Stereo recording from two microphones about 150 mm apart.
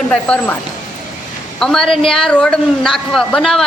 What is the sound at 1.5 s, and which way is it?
A woman's voice, 5° left (ahead or behind).